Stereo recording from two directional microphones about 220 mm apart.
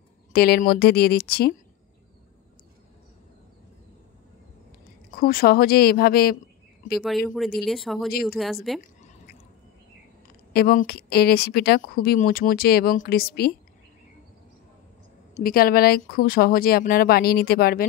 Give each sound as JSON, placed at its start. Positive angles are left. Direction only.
{"t": 0.3, "sound": "speech", "side_deg": 45}
{"t": 5.1, "sound": "speech", "side_deg": 40}
{"t": 7.0, "sound": "speech", "side_deg": 0}
{"t": 8.1, "sound": "speech", "side_deg": 45}
{"t": 8.7, "sound": "speech", "side_deg": 0}
{"t": 10.5, "sound": "speech", "side_deg": 45}
{"t": 15.3, "sound": "speech", "side_deg": 40}